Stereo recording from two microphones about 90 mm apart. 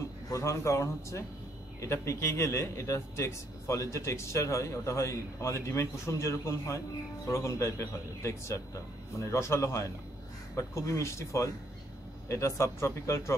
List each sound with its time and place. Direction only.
0.3 s a man's voice: 35° left (ahead or behind)